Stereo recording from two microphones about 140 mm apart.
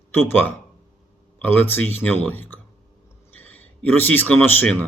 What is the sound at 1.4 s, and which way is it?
A man's voice, 15° left (ahead or behind).